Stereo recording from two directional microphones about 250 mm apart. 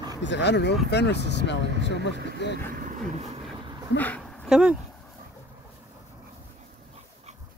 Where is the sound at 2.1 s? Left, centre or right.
Right.